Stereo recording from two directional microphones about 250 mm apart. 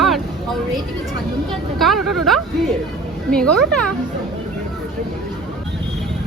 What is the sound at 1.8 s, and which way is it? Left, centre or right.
Speech, centre.